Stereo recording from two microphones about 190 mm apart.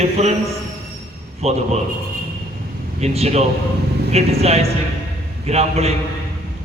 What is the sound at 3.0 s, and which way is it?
Speech, 35° right (ahead or behind).